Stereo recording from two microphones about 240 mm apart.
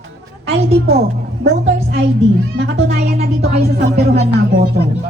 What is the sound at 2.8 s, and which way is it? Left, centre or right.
Music, right.